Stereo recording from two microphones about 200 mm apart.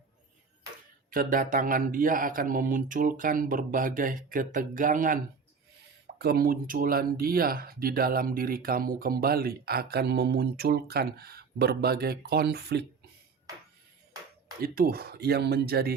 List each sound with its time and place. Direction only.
1.1 s speech: 45° right (ahead or behind)
14.6 s speech: 50° right (ahead or behind)